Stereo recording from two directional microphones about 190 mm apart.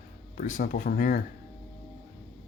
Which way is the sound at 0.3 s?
40° left (ahead or behind).